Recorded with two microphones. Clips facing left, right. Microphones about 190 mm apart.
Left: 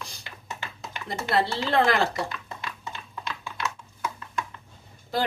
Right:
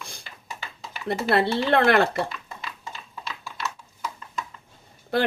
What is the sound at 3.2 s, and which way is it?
Typing, 5° right (ahead or behind).